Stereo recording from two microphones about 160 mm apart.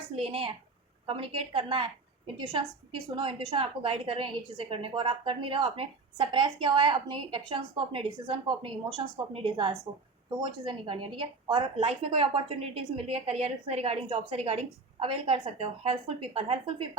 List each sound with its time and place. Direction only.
0.2 s a woman's voice: 35° right (ahead or behind)